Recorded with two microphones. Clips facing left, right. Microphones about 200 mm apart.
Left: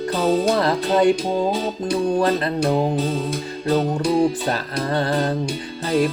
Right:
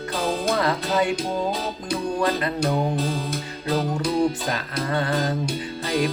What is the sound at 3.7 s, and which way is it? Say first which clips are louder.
Music: left 4 dB; 30° left (ahead or behind).